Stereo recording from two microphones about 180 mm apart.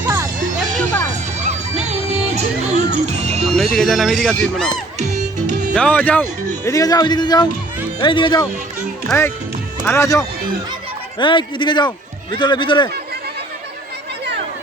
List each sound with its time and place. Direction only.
0.8 s music: 10° left (ahead or behind)
1.4 s music: 40° right (ahead or behind)
3.8 s speech: centre (ahead or behind)
4.9 s music: 40° right (ahead or behind)
5.7 s speech: 5° left (ahead or behind)
11.2 s speech: 25° left (ahead or behind)